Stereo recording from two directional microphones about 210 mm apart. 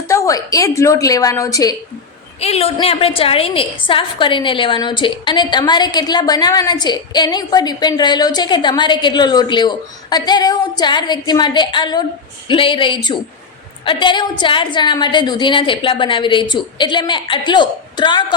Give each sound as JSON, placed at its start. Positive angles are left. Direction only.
{"t": 0.1, "sound": "a woman's voice", "side_deg": 15}
{"t": 2.4, "sound": "a woman's voice", "side_deg": 30}